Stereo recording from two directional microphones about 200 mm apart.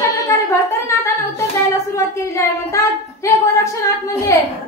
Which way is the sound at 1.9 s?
15° left (ahead or behind).